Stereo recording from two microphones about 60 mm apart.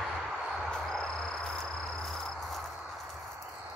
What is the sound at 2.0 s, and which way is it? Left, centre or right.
Cricket, centre.